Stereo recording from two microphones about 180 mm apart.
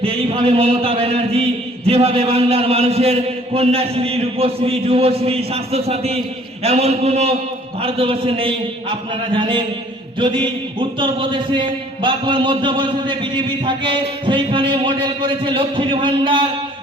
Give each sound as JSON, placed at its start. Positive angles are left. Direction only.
{"t": 0.0, "sound": "a man's voice", "side_deg": -30}